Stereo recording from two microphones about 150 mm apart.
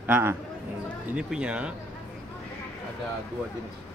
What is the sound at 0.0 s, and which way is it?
Speech, 15° right (ahead or behind).